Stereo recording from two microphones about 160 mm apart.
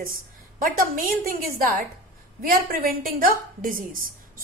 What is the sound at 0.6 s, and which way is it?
A woman's voice, 60° right (ahead or behind).